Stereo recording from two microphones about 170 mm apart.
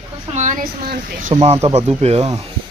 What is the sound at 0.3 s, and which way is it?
Speech, 50° right (ahead or behind).